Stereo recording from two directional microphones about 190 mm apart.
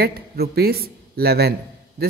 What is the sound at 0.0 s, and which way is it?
A man's voice, 55° right (ahead or behind).